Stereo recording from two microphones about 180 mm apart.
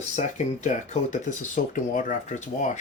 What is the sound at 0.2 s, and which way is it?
Speech, 40° left (ahead or behind).